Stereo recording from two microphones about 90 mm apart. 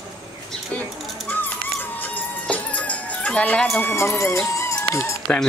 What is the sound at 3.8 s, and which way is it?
Speech, 25° left (ahead or behind).